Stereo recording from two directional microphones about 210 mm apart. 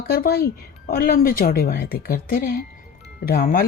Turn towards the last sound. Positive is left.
turn(degrees=45)  # may be behind; listen again after turning